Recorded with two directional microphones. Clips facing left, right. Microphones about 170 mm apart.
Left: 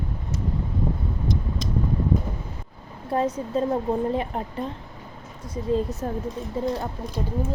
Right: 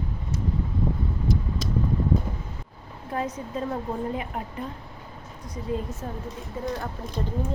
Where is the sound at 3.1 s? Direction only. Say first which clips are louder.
Left 6 dB; 30° left (ahead or behind).